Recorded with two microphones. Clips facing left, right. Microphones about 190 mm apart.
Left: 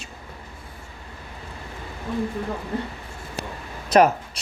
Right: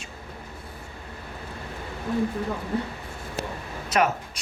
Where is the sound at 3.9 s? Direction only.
35° left (ahead or behind).